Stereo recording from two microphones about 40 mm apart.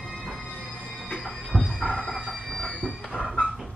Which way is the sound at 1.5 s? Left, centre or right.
Centre.